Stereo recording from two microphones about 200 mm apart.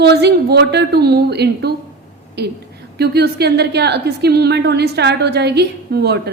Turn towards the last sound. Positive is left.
turn(degrees=-55)  # may be behind; listen again after turning